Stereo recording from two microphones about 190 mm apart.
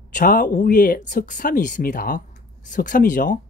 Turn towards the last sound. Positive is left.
turn(degrees=45)  # may be behind; listen again after turning